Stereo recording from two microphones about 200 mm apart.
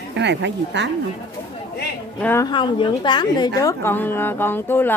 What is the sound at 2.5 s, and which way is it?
A woman's voice, 25° left (ahead or behind).